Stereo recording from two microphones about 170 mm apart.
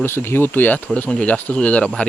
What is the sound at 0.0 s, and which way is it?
Speech, 15° left (ahead or behind).